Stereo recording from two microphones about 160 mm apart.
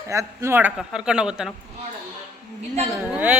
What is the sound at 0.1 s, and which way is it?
A woman's voice, 15° right (ahead or behind).